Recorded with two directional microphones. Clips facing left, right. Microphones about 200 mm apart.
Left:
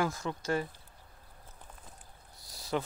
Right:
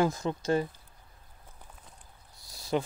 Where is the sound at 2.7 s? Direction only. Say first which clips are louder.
Right 4 dB; 20° right (ahead or behind).